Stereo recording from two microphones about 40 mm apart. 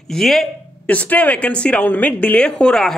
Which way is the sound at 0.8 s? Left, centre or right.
Left.